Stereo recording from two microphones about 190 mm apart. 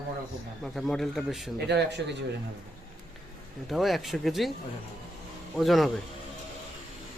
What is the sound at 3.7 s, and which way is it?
Speech, centre (ahead or behind).